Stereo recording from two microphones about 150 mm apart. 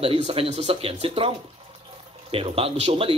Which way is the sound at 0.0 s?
40° right (ahead or behind).